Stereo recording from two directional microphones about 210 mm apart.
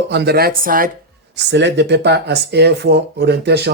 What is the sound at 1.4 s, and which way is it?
Speech, 55° right (ahead or behind).